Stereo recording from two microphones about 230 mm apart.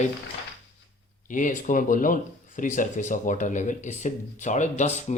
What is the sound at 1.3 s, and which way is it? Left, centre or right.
Speech, left.